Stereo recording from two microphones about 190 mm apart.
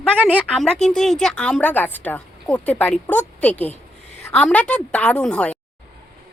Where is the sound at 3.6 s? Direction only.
35° left (ahead or behind).